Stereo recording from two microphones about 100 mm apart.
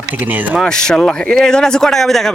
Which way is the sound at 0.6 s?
5° left (ahead or behind).